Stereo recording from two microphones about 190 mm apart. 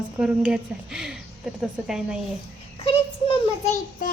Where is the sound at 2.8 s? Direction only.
30° left (ahead or behind).